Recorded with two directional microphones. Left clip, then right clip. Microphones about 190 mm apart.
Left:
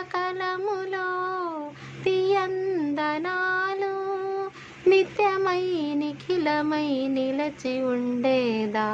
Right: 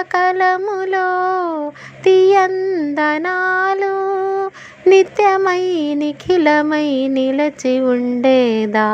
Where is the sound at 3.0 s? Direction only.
35° right (ahead or behind).